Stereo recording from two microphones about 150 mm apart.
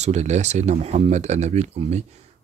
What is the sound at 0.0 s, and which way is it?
Speech, 50° right (ahead or behind).